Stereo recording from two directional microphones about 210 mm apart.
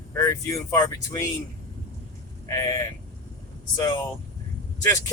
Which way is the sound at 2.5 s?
15° left (ahead or behind).